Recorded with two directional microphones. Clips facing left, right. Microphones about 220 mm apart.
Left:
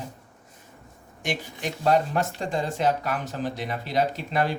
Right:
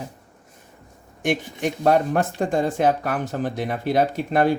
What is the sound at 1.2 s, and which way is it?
Speech, 55° right (ahead or behind).